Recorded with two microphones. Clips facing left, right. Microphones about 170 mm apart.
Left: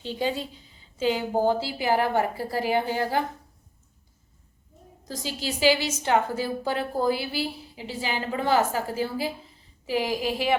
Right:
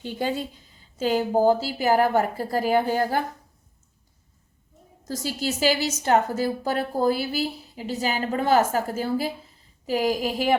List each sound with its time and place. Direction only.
0.0 s a woman's voice: 50° right (ahead or behind)
5.0 s a woman's voice: 45° right (ahead or behind)